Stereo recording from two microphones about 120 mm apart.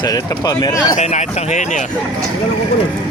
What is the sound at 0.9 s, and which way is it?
Speech, 80° left.